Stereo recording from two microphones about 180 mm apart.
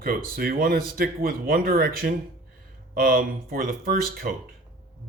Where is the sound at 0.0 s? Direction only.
55° right (ahead or behind).